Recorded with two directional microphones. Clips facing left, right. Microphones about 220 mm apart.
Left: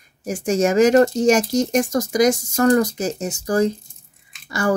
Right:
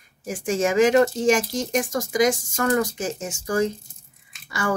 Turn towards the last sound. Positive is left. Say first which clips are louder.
# left 5 dB
turn(degrees=40)  # may be behind; listen again after turning